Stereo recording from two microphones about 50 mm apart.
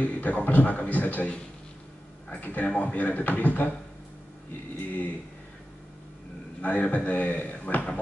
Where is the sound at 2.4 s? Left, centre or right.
Left.